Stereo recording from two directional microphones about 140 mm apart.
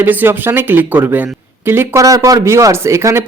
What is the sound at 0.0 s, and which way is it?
Speech, 15° right (ahead or behind).